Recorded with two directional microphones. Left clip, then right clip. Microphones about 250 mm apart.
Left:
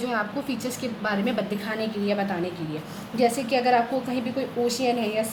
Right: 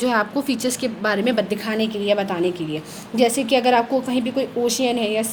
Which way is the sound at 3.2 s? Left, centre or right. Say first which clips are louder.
Right 5 dB; right.